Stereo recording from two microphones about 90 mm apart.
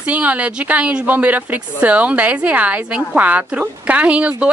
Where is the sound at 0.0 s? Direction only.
15° right (ahead or behind).